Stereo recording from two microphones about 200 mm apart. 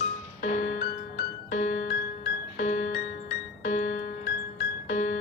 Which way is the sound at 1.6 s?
35° left (ahead or behind).